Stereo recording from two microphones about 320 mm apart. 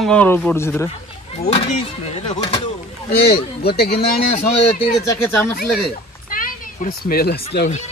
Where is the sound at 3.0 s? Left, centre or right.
Left.